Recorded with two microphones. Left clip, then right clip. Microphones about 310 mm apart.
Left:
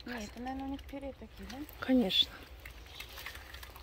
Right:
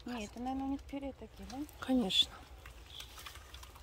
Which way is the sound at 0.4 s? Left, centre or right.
Right.